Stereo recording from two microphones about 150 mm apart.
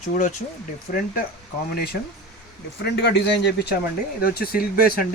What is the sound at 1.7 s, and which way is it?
Speech, 90° left.